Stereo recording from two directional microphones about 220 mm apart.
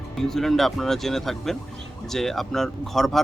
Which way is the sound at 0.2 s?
Centre (ahead or behind).